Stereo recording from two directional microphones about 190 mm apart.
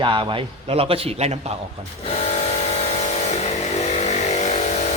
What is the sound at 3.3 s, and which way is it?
Vehicle, 35° left (ahead or behind).